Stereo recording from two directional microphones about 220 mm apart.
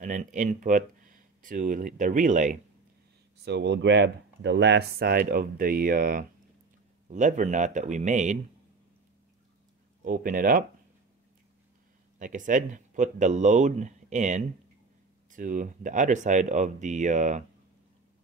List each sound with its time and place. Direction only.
0.0 s speech: 35° right (ahead or behind)
3.4 s speech: 50° right (ahead or behind); by 8.4 s 35° right (ahead or behind)
10.0 s speech: 40° right (ahead or behind)
12.2 s speech: 35° right (ahead or behind)